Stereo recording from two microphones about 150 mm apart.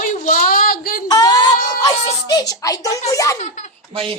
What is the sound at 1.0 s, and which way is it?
A child's voice, 25° left (ahead or behind).